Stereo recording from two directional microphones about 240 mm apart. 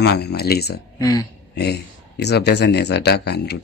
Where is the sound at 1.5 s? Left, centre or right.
Left.